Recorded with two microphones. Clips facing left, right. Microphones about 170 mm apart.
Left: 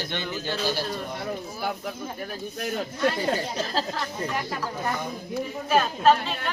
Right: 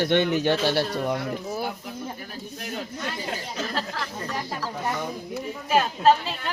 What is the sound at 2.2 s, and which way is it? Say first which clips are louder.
Speech: left 5 dB; 55° left (ahead or behind).